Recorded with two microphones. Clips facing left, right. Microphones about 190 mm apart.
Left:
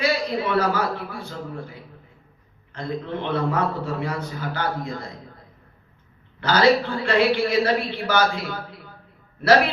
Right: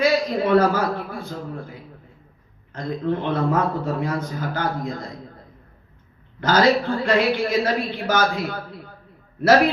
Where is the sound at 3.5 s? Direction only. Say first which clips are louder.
Right 3 dB; 50° right (ahead or behind).